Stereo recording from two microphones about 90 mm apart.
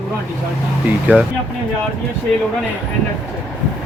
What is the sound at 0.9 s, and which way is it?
Speech, 15° right (ahead or behind).